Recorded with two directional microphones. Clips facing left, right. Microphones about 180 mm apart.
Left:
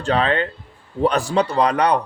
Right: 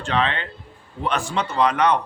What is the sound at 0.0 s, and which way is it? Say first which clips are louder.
Speech: left 4 dB; 40° left (ahead or behind).